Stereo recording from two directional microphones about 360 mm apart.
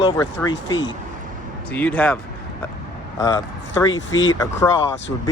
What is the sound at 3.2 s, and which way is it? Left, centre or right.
Speech, centre.